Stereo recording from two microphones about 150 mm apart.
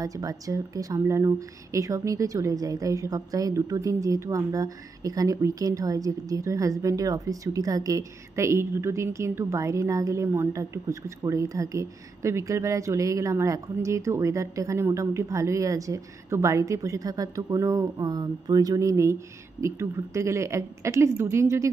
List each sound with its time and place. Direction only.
0.0 s a woman's voice: 25° right (ahead or behind)